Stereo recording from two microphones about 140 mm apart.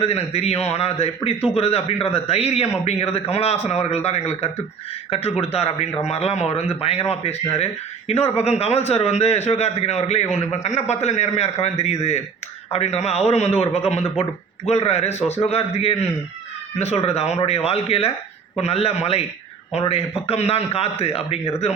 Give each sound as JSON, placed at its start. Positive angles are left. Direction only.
{"t": 0.0, "sound": "speech", "side_deg": 45}